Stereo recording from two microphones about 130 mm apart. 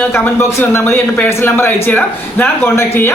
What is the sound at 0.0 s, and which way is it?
Speech, 15° left (ahead or behind).